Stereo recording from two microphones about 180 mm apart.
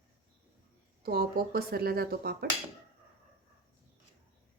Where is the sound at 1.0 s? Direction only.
60° right (ahead or behind).